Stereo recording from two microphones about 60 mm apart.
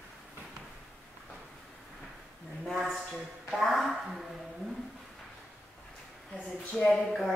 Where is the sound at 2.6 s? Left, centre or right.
Centre.